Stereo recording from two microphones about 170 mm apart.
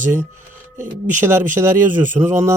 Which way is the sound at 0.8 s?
15° right (ahead or behind).